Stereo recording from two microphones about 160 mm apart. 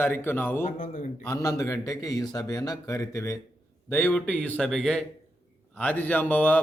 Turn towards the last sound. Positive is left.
turn(degrees=10)  # may be behind; listen again after turning